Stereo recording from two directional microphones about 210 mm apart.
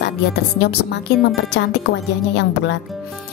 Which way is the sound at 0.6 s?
50° left (ahead or behind).